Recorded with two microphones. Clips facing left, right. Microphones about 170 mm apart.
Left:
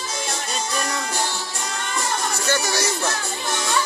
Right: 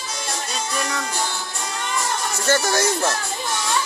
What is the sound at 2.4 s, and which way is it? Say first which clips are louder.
Music: right 5 dB; 50° right (ahead or behind).